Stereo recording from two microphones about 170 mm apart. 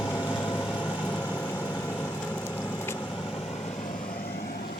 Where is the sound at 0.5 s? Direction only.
10° left (ahead or behind).